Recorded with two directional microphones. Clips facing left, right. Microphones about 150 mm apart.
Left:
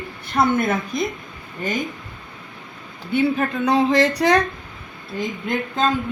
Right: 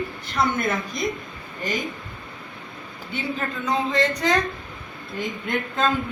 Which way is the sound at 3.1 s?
65° left (ahead or behind).